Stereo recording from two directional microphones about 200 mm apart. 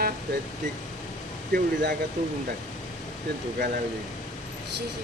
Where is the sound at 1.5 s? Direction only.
55° right (ahead or behind).